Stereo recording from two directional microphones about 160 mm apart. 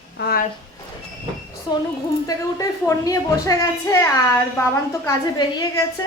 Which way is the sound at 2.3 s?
20° left (ahead or behind).